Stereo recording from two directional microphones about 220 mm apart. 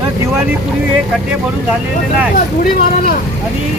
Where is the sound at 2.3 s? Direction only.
40° left (ahead or behind).